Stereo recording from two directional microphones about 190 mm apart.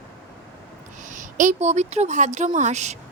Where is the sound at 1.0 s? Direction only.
40° right (ahead or behind).